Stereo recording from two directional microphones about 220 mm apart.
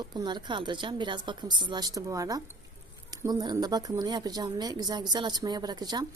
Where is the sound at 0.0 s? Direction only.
20° right (ahead or behind).